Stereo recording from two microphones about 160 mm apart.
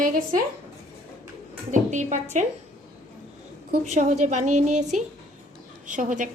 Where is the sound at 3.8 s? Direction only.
45° right (ahead or behind).